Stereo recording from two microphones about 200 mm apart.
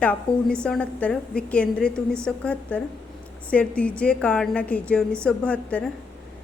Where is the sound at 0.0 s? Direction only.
5° left (ahead or behind).